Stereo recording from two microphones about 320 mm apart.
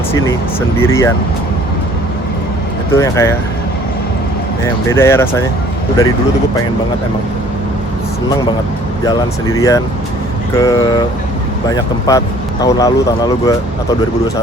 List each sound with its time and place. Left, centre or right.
0.8 s speech: centre
2.9 s speech: centre
4.6 s speech: centre
9.6 s speech: centre